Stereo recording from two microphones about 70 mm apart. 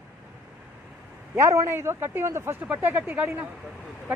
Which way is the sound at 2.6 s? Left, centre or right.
Right.